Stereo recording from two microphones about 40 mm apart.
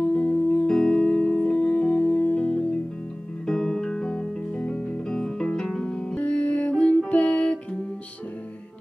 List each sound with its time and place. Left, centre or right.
0.0 s music: left
0.7 s music: left
3.4 s music: centre
6.1 s music: left